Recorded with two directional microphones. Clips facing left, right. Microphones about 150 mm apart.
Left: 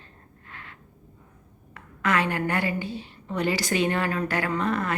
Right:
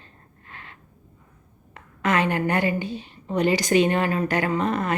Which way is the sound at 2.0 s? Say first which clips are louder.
Right 3 dB; 20° right (ahead or behind).